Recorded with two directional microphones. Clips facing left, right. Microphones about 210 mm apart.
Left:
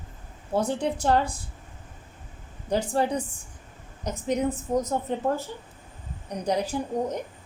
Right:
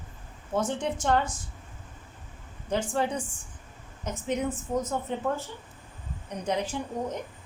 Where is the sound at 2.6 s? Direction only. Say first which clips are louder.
Left 3 dB; 35° left (ahead or behind).